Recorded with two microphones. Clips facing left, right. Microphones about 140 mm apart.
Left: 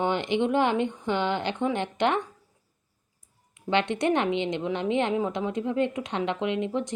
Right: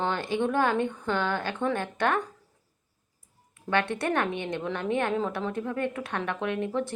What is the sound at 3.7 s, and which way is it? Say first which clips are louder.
A woman's voice: left 3 dB; 20° left (ahead or behind).